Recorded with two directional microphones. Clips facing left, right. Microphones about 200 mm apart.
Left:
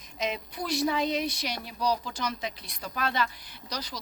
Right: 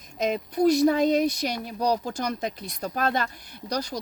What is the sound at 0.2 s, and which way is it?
Speech, 40° right (ahead or behind).